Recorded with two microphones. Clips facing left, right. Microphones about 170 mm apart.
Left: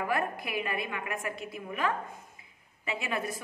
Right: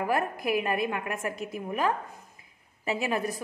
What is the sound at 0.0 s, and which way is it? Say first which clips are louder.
A woman's voice: right 3 dB; 40° right (ahead or behind).